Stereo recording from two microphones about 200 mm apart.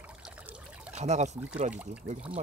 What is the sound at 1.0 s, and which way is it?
Speech, 35° right (ahead or behind).